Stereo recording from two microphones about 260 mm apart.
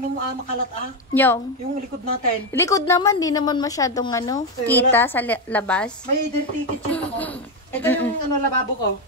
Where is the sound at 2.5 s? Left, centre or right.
Centre.